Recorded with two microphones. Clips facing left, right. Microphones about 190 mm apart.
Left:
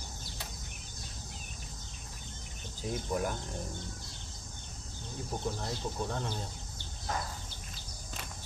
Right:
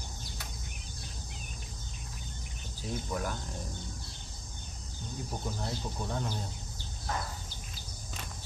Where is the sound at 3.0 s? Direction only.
15° left (ahead or behind).